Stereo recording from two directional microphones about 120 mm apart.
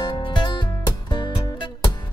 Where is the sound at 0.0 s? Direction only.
40° left (ahead or behind).